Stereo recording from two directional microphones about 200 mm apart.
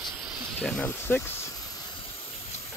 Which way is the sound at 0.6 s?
5° left (ahead or behind).